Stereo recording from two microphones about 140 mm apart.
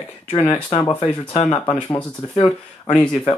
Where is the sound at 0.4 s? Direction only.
10° left (ahead or behind).